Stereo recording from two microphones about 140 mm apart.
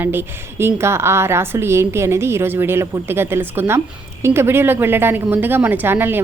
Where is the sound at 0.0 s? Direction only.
15° right (ahead or behind).